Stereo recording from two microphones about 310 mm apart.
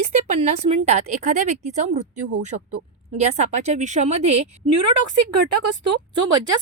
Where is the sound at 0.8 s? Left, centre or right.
Right.